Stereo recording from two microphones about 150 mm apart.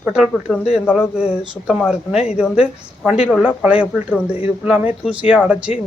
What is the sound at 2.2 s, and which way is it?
Speech, 5° right (ahead or behind).